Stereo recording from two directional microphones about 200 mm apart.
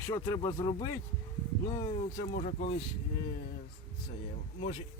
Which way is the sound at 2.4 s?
30° left (ahead or behind).